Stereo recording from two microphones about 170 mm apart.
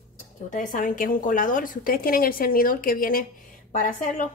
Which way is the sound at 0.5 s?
50° left (ahead or behind).